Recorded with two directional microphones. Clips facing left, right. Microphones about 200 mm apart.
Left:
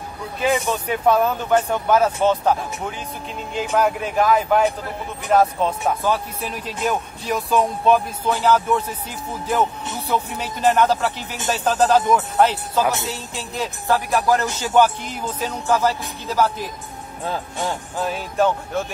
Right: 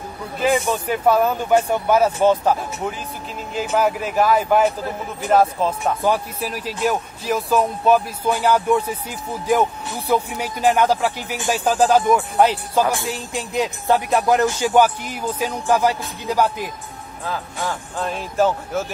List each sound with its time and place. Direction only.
0.4 s music: centre (ahead or behind)
3.7 s speech: 5° right (ahead or behind)
6.0 s music: 10° right (ahead or behind)
10.0 s music: 10° right (ahead or behind)
17.2 s speech: 25° left (ahead or behind)
17.9 s speech: 5° left (ahead or behind)